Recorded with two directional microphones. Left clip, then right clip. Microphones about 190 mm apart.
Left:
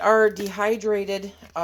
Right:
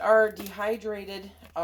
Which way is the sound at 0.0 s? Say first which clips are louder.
Left 3 dB; 45° left (ahead or behind).